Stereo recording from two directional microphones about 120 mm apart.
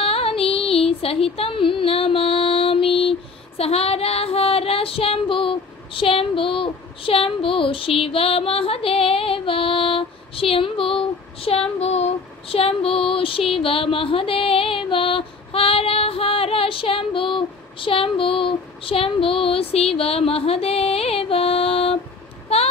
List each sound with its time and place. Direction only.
0.0 s music: 50° left (ahead or behind)
22.5 s child singing: 55° left (ahead or behind)